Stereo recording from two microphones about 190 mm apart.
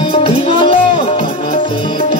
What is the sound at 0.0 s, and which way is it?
Music, 25° left (ahead or behind).